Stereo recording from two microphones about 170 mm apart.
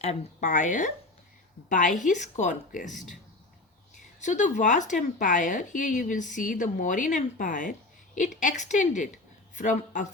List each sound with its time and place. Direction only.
0.0 s speech: 40° left (ahead or behind)